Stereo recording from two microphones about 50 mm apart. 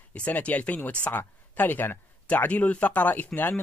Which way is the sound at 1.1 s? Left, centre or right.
Left.